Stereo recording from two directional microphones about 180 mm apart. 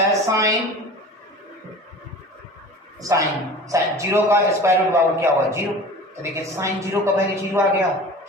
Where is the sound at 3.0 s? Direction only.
20° right (ahead or behind).